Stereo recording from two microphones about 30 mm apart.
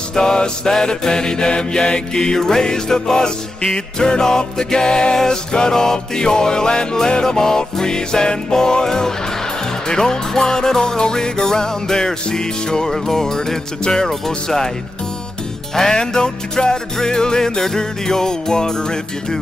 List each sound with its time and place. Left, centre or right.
0.1 s music: left
15.7 s music: centre